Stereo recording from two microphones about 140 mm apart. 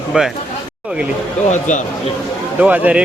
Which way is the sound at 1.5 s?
60° left (ahead or behind).